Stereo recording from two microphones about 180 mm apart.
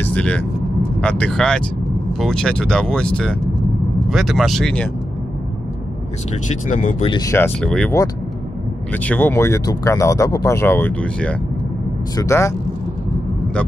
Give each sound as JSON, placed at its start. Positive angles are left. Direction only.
{"t": 0.0, "sound": "vehicle", "side_deg": 5}
{"t": 1.0, "sound": "speech", "side_deg": 5}
{"t": 6.7, "sound": "speech", "side_deg": 45}
{"t": 7.1, "sound": "speech", "side_deg": 20}
{"t": 8.9, "sound": "speech", "side_deg": 10}